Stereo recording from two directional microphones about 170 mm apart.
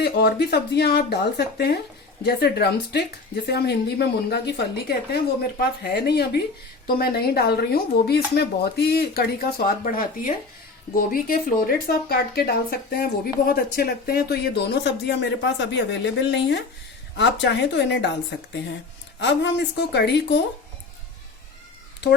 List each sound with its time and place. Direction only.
0.0 s speech: 70° left (ahead or behind)
6.8 s a woman's voice: 60° left (ahead or behind); by 20.4 s 80° left